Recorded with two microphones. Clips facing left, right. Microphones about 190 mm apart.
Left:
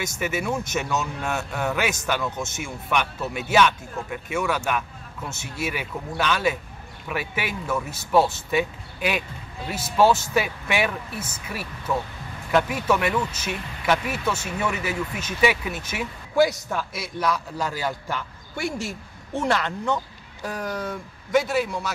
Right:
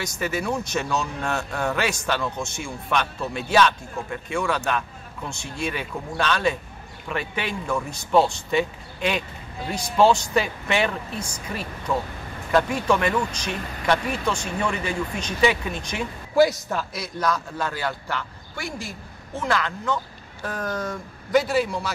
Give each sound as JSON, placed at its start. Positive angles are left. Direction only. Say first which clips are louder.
{"t": 0.2, "sound": "speech", "louder": "right 1 dB", "side_deg": 5}
{"t": 18.8, "sound": "speech", "louder": "left 4 dB", "side_deg": 75}
{"t": 20.4, "sound": "speech", "louder": "right 1 dB", "side_deg": 10}